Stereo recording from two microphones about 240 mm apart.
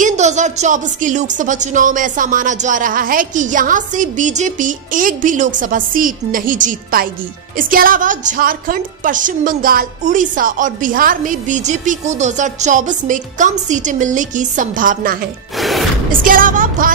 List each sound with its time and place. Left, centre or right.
0.0 s a woman's voice: right
15.5 s music: centre
16.1 s a woman's voice: right